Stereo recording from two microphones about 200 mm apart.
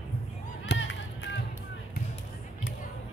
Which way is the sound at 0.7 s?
65° left (ahead or behind).